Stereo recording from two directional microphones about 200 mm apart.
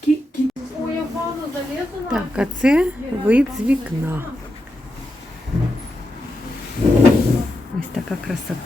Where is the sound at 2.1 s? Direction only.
5° right (ahead or behind).